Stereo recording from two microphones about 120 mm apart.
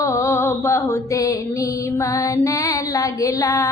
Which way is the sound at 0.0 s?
25° left (ahead or behind).